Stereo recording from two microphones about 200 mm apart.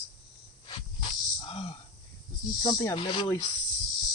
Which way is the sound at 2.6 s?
20° left (ahead or behind).